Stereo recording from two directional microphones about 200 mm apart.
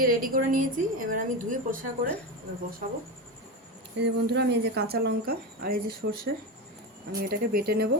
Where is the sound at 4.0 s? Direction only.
55° right (ahead or behind).